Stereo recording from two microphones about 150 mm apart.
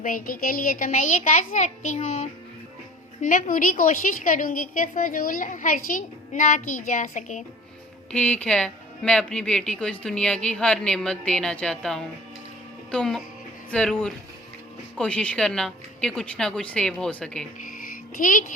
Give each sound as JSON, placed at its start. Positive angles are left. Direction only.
{"t": 0.0, "sound": "a woman's voice", "side_deg": 65}
{"t": 8.1, "sound": "speech", "side_deg": 10}
{"t": 18.2, "sound": "a woman's voice", "side_deg": 65}